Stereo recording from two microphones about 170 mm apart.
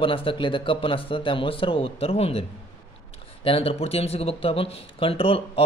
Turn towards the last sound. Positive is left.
turn(degrees=35)  # may be behind; listen again after turning